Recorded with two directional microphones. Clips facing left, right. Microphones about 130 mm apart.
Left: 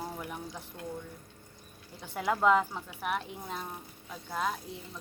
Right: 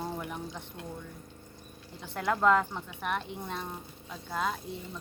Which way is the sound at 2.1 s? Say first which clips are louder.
Even; 10° left (ahead or behind).